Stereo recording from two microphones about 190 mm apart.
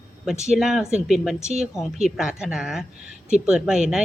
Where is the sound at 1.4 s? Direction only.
35° right (ahead or behind).